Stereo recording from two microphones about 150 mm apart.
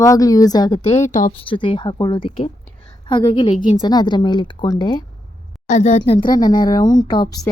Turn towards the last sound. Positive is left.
turn(degrees=25)  # may be behind; listen again after turning